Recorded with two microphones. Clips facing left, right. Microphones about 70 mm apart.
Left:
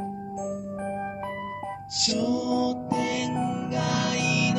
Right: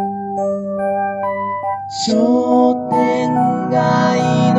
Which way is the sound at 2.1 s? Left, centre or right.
Right.